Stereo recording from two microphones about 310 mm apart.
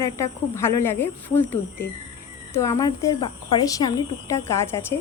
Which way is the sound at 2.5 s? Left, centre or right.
Centre.